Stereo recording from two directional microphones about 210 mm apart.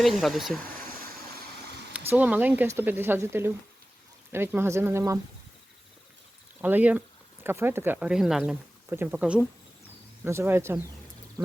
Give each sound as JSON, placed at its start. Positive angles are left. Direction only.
{"t": 0.0, "sound": "speech", "side_deg": 0}
{"t": 0.9, "sound": "boat", "side_deg": -45}
{"t": 1.9, "sound": "speech", "side_deg": -5}
{"t": 6.6, "sound": "speech", "side_deg": -5}
{"t": 11.4, "sound": "frog", "side_deg": -10}